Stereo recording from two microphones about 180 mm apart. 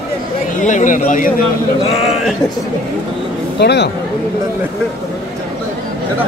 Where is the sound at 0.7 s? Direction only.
45° left (ahead or behind).